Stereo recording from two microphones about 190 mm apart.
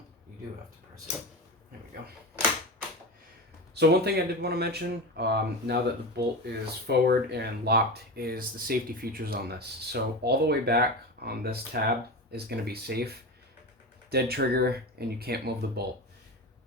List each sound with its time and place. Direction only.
3.8 s speech: 60° right (ahead or behind)